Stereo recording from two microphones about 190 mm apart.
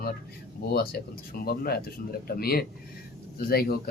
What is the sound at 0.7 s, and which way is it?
Speech, 50° left (ahead or behind).